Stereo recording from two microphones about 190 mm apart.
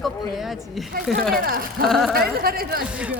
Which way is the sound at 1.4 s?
50° right (ahead or behind).